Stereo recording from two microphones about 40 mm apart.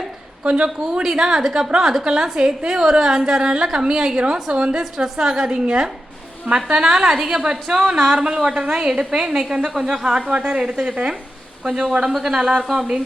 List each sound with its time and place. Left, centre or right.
0.4 s a woman's voice: right
1.1 s a woman's voice: centre
4.8 s a woman's voice: centre